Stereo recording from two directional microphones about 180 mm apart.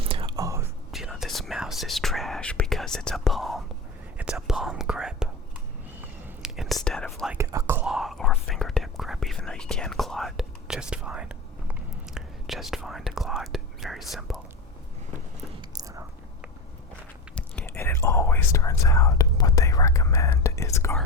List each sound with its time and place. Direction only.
0.0 s whispering: 30° right (ahead or behind)
0.9 s whispering: centre (ahead or behind)
7.3 s whispering: 15° right (ahead or behind)
7.9 s whispering: centre (ahead or behind)
15.7 s whispering: 20° right (ahead or behind)
17.3 s whispering: 5° left (ahead or behind)